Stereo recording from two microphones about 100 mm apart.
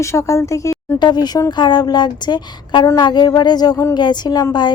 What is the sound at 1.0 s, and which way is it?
A woman's voice, 45° left (ahead or behind).